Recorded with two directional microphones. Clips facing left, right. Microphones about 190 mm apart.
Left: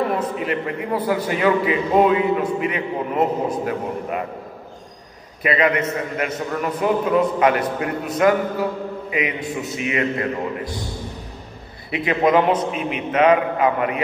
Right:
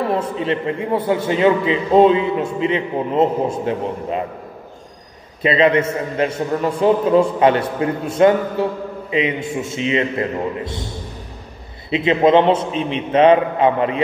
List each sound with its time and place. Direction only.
0.1 s a man's voice: 30° right (ahead or behind)
5.4 s a man's voice: 25° right (ahead or behind)
11.9 s a man's voice: 25° right (ahead or behind)